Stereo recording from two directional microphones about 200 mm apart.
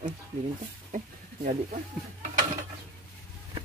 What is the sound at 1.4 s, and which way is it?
Speech, 40° right (ahead or behind).